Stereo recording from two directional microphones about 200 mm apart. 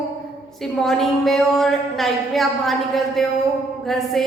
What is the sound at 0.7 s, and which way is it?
Speech, centre (ahead or behind).